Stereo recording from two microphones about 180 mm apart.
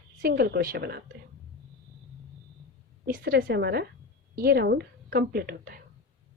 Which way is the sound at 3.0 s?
55° right (ahead or behind).